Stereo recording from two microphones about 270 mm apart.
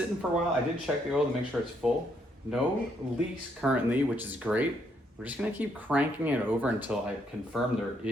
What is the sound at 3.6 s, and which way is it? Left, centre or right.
Speech, centre.